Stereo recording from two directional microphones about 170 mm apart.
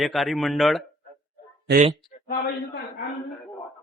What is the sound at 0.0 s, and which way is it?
Speech, centre (ahead or behind).